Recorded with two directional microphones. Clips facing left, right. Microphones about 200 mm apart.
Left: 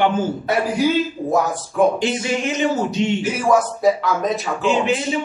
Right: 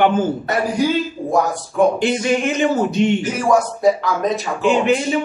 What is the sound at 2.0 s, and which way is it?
A man's voice, 55° right (ahead or behind).